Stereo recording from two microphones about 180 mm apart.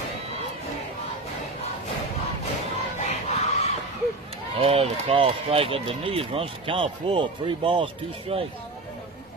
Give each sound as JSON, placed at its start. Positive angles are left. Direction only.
{"t": 3.0, "sound": "crowd", "side_deg": 40}
{"t": 4.6, "sound": "speech", "side_deg": -30}